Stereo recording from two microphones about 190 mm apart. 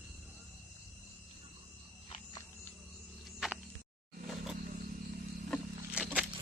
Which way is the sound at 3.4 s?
Centre (ahead or behind).